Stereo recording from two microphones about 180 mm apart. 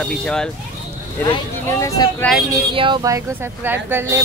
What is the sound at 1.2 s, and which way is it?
Speech, 20° left (ahead or behind).